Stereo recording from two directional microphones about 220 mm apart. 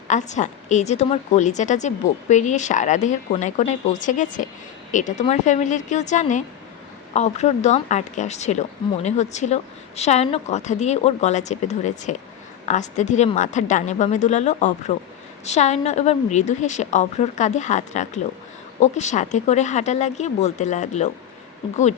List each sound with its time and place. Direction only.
0.1 s a woman's voice: 35° left (ahead or behind)